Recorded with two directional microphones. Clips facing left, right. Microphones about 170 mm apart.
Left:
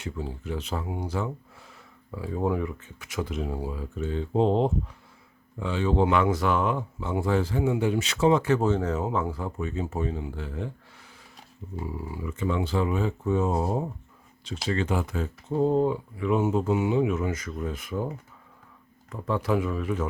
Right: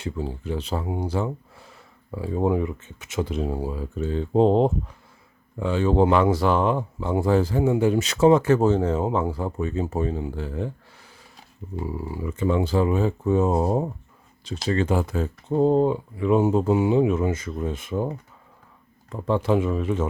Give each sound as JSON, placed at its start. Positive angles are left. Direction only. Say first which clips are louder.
{"t": 0.0, "sound": "speech", "louder": "right 4 dB", "side_deg": -30}
{"t": 12.1, "sound": "speech", "louder": "right 5 dB", "side_deg": -35}
{"t": 15.5, "sound": "speech", "louder": "right 4 dB", "side_deg": -30}
{"t": 19.1, "sound": "speech", "louder": "right 4 dB", "side_deg": -25}